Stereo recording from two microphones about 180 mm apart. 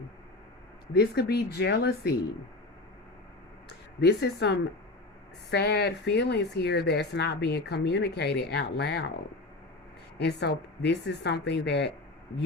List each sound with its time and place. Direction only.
0.9 s a woman's voice: 60° left (ahead or behind)
4.0 s a woman's voice: 70° left (ahead or behind)
10.2 s a woman's voice: 65° left (ahead or behind)